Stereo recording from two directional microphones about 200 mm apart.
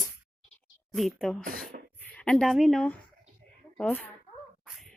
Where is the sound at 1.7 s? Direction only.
45° right (ahead or behind).